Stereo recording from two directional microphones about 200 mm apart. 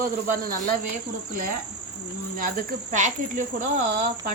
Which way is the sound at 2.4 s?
40° right (ahead or behind).